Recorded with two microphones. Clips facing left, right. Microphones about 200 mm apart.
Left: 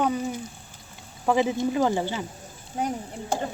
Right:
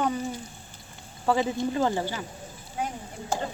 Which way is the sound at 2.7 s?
40° left (ahead or behind).